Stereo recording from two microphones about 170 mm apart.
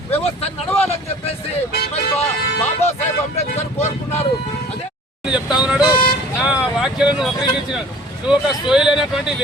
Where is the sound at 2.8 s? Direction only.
40° left (ahead or behind).